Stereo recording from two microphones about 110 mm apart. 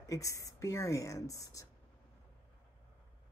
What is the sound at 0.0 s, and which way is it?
Speech, 30° left (ahead or behind).